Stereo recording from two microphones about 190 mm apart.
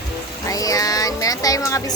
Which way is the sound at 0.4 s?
20° left (ahead or behind).